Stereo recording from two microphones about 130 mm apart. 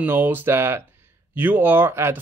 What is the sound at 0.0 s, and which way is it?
Speech, 15° right (ahead or behind).